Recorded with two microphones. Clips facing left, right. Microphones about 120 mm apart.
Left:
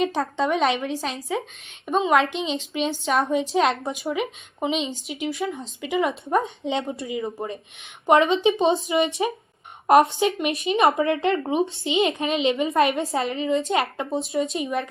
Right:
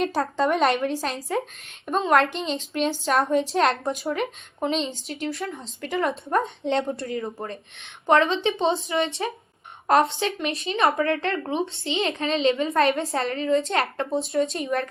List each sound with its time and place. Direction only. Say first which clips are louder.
0.0 s a woman's voice: even; centre (ahead or behind)